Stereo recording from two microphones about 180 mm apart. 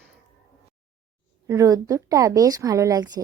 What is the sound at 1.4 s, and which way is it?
A woman's voice, 15° right (ahead or behind).